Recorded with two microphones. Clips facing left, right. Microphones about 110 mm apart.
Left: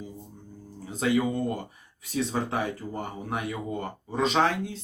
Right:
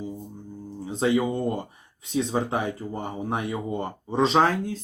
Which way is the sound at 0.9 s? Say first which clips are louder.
Right 2 dB; 25° right (ahead or behind).